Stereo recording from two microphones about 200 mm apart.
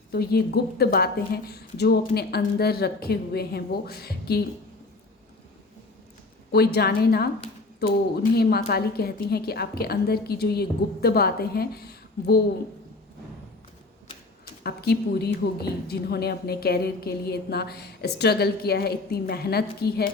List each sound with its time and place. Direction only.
0.1 s a woman's voice: 50° left (ahead or behind)
6.5 s a woman's voice: 50° left (ahead or behind)
14.6 s a woman's voice: 50° left (ahead or behind)